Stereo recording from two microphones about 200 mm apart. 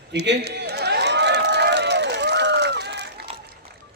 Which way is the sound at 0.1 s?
55° right (ahead or behind).